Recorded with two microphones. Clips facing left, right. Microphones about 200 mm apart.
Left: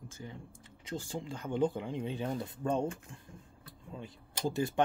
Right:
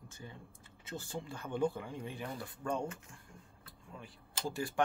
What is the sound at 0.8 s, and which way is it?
Speech, 15° left (ahead or behind).